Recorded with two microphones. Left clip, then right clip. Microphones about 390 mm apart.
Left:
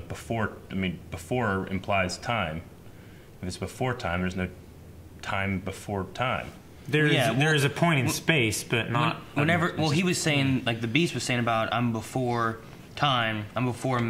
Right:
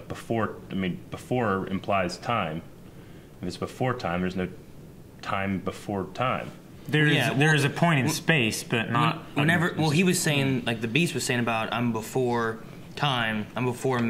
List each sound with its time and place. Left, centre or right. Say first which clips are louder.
0.1 s speech: right 2 dB; right
7.3 s speech: right 1 dB; left
9.5 s speech: right 1 dB; left